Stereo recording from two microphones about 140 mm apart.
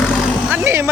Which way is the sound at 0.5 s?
15° right (ahead or behind).